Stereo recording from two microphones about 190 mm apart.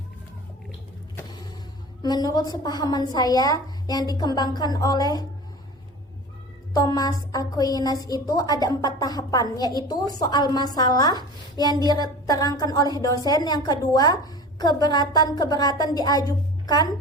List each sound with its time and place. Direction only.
2.0 s a woman's voice: 20° left (ahead or behind)
6.7 s a woman's voice: 20° left (ahead or behind)